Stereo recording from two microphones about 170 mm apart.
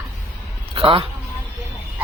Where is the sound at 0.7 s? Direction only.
35° right (ahead or behind).